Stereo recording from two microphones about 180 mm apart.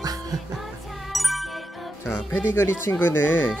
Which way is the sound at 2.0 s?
15° left (ahead or behind).